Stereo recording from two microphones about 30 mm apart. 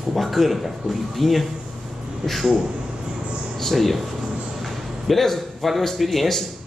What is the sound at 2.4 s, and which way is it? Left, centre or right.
Speech, centre.